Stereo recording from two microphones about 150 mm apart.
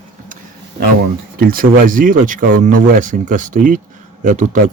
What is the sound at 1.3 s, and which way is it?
Speech, 70° right (ahead or behind).